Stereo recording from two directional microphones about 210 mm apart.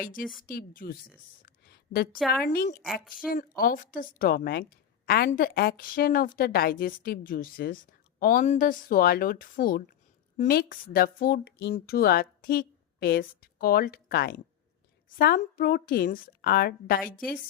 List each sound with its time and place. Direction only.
0.0 s a woman's voice: 40° left (ahead or behind)
1.4 s a sound: 45° left (ahead or behind)
2.4 s a woman's voice: 45° left (ahead or behind)
2.8 s a woman's voice: centre (ahead or behind)
3.2 s a woman's voice: 40° left (ahead or behind)